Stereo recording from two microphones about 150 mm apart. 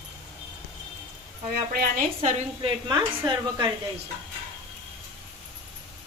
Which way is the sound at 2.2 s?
45° right (ahead or behind).